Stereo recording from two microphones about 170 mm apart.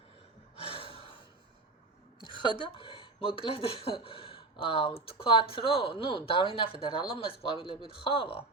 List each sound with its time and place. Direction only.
0.6 s gasp: 35° left (ahead or behind)
2.2 s speech: 30° left (ahead or behind)